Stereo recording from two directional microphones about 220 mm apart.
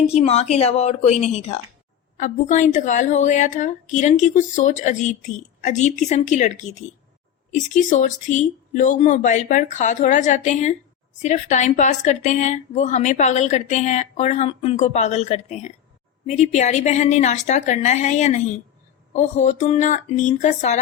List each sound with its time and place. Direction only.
0.1 s a woman's voice: 30° left (ahead or behind)